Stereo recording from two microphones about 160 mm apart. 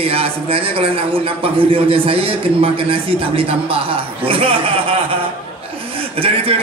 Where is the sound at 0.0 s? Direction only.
35° right (ahead or behind).